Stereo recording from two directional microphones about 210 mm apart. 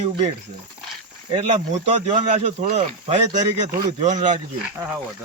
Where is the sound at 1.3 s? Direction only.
35° right (ahead or behind).